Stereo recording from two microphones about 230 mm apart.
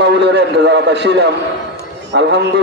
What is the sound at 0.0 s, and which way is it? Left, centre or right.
A man's voice, right.